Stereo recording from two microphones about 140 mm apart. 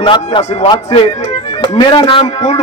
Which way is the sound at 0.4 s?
50° left (ahead or behind).